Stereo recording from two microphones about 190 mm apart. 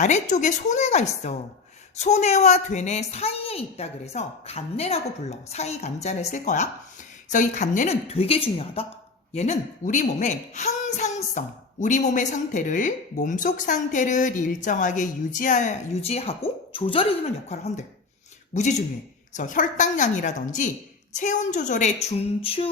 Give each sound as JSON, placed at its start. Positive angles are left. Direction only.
{"t": 0.0, "sound": "a woman's voice", "side_deg": 40}